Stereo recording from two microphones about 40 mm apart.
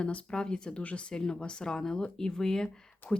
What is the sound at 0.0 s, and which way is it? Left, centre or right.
Speech, left.